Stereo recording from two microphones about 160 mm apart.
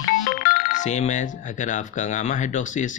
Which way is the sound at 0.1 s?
55° left (ahead or behind).